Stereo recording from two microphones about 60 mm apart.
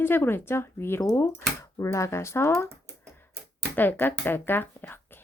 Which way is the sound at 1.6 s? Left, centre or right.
Left.